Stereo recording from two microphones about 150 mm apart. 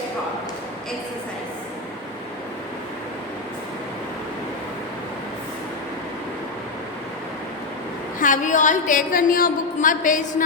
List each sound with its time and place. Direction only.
8.2 s a woman's voice: 55° left (ahead or behind)